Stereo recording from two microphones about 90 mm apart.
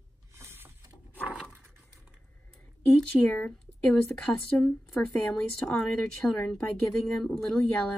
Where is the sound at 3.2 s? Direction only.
5° right (ahead or behind).